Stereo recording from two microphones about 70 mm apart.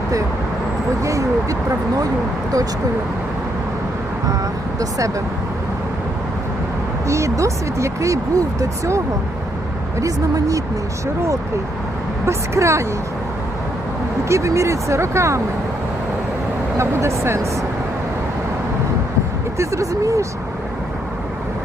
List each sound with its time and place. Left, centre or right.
1.0 s speech: right
4.8 s speech: right
7.1 s speech: right
10.0 s speech: right
12.2 s speech: right
14.3 s speech: right
16.7 s speech: right
19.5 s speech: right